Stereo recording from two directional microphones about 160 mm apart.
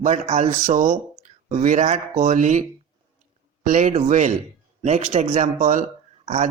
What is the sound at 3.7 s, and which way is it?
Speech, 50° right (ahead or behind).